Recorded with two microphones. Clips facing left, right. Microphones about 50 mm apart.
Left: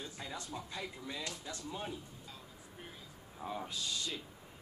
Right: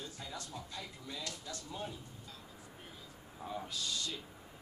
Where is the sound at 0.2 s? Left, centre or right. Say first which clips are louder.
Left 4 dB; centre.